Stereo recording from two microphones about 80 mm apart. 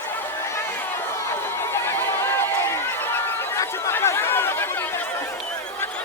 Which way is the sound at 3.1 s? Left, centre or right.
Left.